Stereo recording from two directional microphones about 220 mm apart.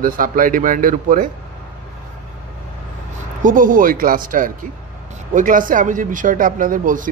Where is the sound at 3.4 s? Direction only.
35° right (ahead or behind).